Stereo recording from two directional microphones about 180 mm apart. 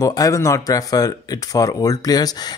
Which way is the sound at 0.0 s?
20° left (ahead or behind).